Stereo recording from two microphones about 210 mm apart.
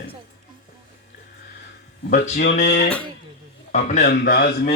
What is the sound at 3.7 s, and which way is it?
Speech, 35° left (ahead or behind).